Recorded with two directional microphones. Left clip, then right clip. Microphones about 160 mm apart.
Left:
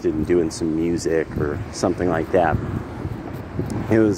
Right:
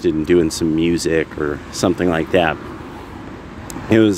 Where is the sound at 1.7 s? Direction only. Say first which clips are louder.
Right 4 dB; 30° right (ahead or behind).